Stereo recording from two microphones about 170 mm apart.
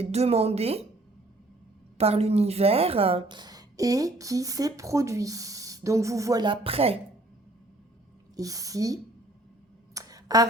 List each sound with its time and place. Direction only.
0.0 s a woman's voice: 40° right (ahead or behind)
2.0 s a woman's voice: 40° right (ahead or behind)
8.4 s a woman's voice: 20° right (ahead or behind)
9.9 s a sound: 20° right (ahead or behind)